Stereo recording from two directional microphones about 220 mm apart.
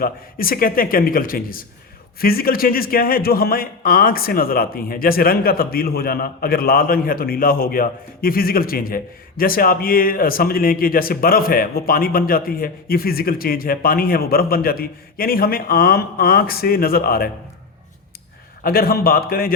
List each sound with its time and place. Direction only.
0.0 s speech: 40° left (ahead or behind)
18.6 s a man's voice: 45° left (ahead or behind)